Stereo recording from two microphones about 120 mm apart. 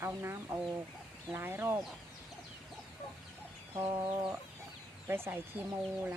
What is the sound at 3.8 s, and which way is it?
Speech, 20° right (ahead or behind).